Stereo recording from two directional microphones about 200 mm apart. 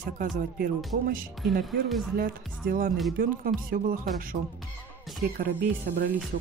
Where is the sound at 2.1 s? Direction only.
45° right (ahead or behind).